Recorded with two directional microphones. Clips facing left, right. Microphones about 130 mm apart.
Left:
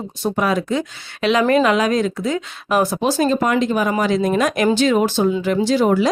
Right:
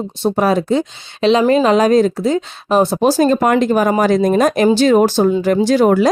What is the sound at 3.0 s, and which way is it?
Speech, 45° right (ahead or behind).